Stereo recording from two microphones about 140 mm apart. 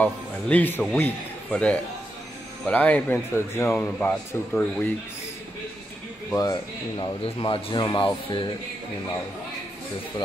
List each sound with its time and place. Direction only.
0.0 s a man's voice: 10° left (ahead or behind)
6.3 s speech: 30° left (ahead or behind)